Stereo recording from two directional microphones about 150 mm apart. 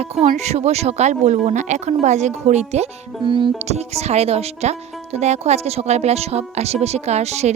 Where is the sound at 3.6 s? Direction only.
45° right (ahead or behind).